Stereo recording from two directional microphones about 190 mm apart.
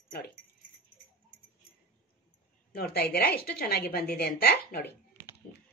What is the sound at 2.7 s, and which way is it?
A woman's voice, 55° left (ahead or behind).